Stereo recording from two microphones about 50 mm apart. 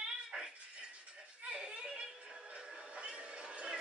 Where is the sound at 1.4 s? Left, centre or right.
Right.